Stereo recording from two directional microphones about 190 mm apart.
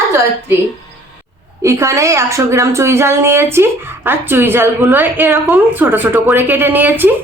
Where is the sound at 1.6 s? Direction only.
15° right (ahead or behind).